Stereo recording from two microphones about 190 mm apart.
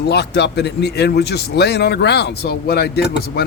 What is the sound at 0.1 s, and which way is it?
Speech, 60° left (ahead or behind).